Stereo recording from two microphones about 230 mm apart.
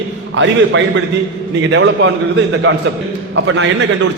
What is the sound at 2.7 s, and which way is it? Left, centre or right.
Speech, right.